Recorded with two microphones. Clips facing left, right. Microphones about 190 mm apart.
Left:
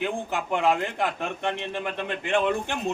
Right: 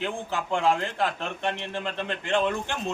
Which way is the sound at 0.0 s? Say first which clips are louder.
Left 2 dB; 15° left (ahead or behind).